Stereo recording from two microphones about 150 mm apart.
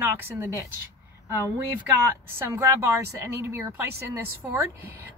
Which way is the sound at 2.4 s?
20° right (ahead or behind).